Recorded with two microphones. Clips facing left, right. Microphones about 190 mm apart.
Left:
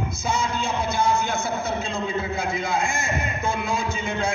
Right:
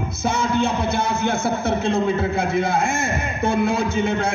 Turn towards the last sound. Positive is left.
turn(degrees=-65)  # may be behind; listen again after turning